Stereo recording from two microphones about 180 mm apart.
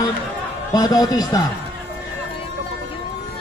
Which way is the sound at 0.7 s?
20° left (ahead or behind).